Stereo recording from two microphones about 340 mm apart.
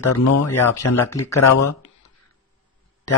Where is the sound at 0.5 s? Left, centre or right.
Centre.